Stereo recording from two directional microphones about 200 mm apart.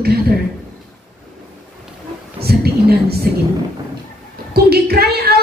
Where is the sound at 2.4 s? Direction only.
50° right (ahead or behind).